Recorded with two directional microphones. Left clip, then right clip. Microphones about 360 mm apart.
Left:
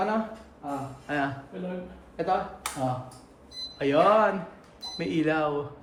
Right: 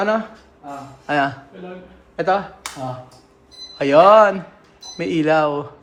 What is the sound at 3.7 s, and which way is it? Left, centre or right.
Speech, centre.